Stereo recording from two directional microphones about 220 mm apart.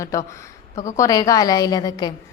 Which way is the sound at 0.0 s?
15° left (ahead or behind).